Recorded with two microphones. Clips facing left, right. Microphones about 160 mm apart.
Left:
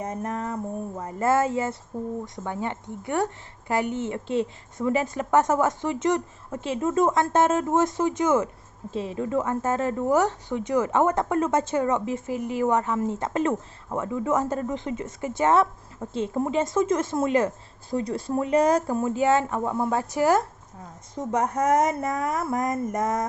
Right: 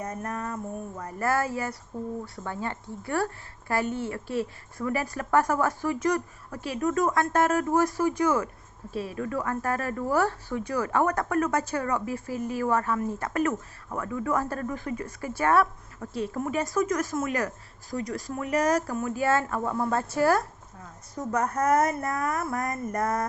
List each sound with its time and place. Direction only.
0.0 s speech: 20° left (ahead or behind)